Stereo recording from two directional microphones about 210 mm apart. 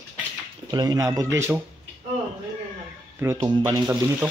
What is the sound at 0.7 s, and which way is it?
Speech, 20° right (ahead or behind).